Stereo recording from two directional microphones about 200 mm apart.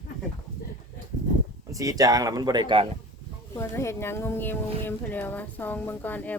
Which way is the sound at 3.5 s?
15° left (ahead or behind).